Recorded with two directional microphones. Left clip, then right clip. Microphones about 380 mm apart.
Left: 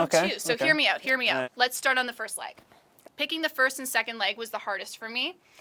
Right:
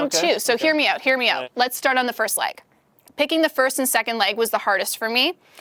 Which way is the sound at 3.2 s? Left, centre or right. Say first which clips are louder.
Right 7 dB; right.